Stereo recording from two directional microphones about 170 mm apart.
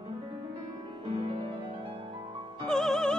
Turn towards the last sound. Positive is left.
turn(degrees=5)  # may be behind; listen again after turning